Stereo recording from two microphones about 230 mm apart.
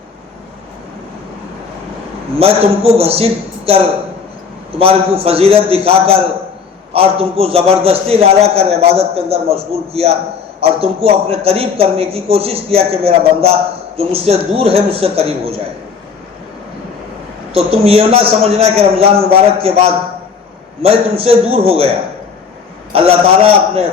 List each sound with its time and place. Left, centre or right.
2.4 s a man's voice: right
4.8 s a man's voice: right
17.5 s a man's voice: right
22.9 s a man's voice: right